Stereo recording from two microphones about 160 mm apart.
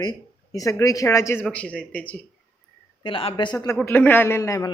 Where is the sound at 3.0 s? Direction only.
35° left (ahead or behind).